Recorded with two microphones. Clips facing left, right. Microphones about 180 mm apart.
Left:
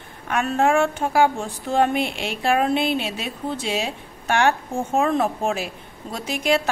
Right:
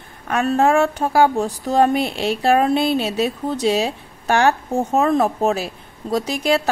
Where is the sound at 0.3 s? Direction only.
35° right (ahead or behind).